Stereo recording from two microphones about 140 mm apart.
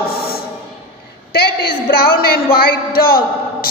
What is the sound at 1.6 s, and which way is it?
A man's voice, 90° left.